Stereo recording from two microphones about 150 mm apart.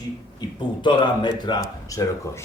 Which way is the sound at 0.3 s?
30° left (ahead or behind).